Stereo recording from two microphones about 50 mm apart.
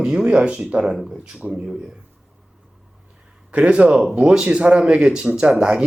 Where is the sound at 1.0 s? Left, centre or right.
Centre.